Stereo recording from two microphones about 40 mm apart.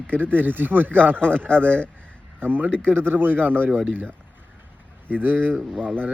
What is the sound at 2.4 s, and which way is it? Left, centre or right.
Speech, right.